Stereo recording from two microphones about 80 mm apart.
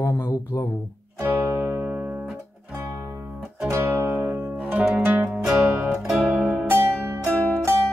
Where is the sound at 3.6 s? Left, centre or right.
Right; by 6.2 s centre.